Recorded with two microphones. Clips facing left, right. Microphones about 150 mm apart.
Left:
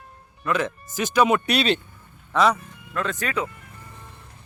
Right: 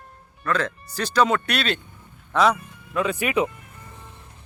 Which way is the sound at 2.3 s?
Centre (ahead or behind).